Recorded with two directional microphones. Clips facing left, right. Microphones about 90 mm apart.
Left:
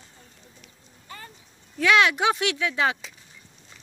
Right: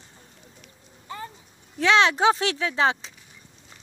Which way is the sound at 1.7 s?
30° right (ahead or behind).